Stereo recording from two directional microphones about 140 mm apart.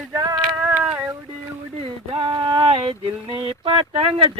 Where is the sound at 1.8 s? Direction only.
40° right (ahead or behind).